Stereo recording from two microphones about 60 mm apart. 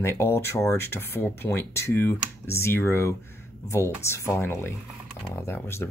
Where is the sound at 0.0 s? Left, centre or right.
Left.